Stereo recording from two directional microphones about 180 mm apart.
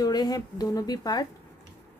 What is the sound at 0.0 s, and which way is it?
A woman's voice, 20° left (ahead or behind).